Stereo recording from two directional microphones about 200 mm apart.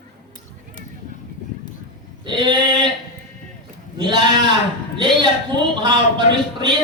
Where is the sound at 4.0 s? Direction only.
25° right (ahead or behind).